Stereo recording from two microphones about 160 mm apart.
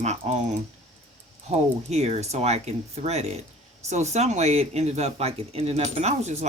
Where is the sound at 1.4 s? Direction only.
45° right (ahead or behind).